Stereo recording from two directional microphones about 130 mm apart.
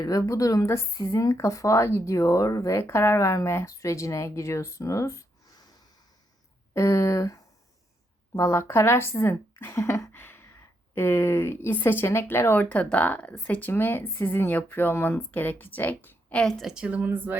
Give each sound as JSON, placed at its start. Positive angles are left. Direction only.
{"t": 0.0, "sound": "speech", "side_deg": 25}
{"t": 6.7, "sound": "speech", "side_deg": 20}
{"t": 8.4, "sound": "speech", "side_deg": 20}